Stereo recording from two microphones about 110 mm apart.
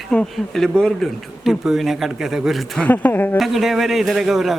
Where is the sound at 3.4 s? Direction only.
Centre (ahead or behind).